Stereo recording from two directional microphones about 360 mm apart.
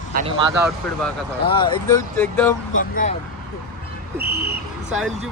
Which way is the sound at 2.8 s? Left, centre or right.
Left.